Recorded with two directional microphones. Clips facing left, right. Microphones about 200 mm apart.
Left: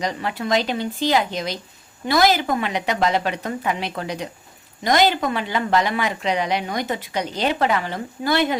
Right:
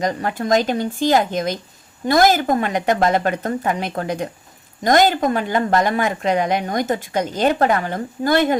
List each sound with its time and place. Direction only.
0.0 s a woman's voice: 45° right (ahead or behind)